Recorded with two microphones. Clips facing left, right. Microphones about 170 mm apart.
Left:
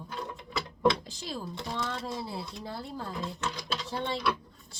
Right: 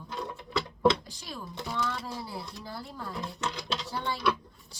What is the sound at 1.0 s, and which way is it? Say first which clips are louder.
Speech: left 4 dB; 25° left (ahead or behind).